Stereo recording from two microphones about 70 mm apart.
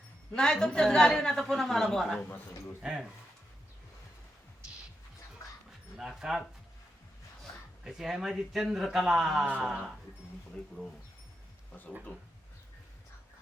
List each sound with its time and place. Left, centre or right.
0.3 s a woman's voice: centre
2.8 s speech: centre
6.0 s speech: centre
7.9 s a man's voice: centre
11.7 s speech: centre